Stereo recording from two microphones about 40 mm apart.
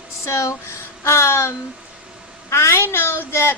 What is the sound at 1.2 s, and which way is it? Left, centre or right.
A woman's voice, left.